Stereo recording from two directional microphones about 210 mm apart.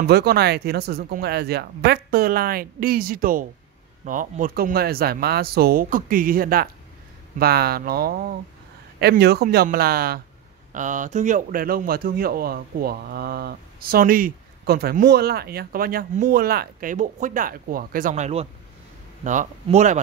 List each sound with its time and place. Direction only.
0.0 s speech: 50° right (ahead or behind)